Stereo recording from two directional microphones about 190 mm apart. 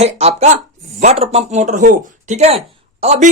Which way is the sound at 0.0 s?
35° right (ahead or behind).